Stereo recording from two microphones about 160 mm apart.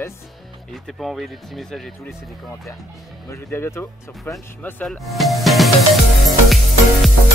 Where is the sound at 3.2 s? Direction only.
15° left (ahead or behind); by 5.6 s centre (ahead or behind).